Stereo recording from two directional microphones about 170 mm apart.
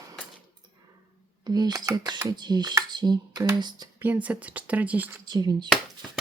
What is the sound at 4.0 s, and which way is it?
Speech, 10° right (ahead or behind).